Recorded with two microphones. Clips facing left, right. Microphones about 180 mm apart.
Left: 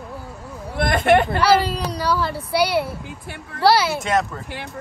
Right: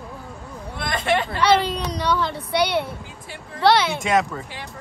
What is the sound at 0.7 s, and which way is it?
Speech, 55° left (ahead or behind).